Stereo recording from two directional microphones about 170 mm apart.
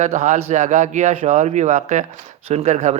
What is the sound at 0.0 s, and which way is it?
Speech, 45° right (ahead or behind).